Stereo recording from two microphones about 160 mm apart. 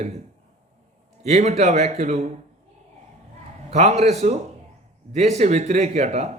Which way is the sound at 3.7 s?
45° right (ahead or behind).